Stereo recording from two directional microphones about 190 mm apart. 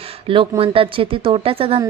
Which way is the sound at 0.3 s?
30° right (ahead or behind).